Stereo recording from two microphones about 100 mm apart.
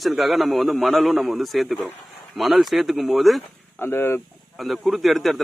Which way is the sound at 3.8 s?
25° left (ahead or behind).